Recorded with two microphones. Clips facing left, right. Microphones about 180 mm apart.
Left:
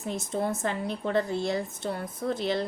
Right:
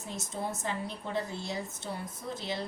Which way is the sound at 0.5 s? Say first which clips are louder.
Left 6 dB; 65° left (ahead or behind).